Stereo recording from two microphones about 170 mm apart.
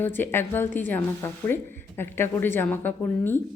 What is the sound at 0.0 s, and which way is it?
A woman's voice, 10° left (ahead or behind).